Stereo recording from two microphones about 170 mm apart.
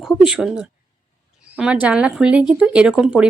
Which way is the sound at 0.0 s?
5° right (ahead or behind).